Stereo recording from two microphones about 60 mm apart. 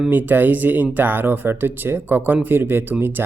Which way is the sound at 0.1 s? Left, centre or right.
Right.